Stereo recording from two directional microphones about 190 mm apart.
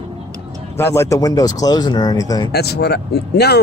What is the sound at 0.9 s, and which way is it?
Speech, 20° left (ahead or behind).